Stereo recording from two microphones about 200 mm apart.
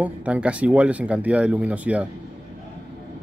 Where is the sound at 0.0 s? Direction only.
5° right (ahead or behind).